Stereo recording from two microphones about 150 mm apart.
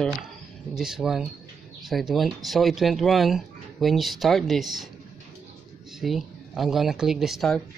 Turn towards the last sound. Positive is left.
turn(degrees=0)  # may be behind; listen again after turning